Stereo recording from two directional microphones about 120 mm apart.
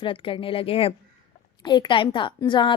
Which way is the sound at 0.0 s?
45° left (ahead or behind).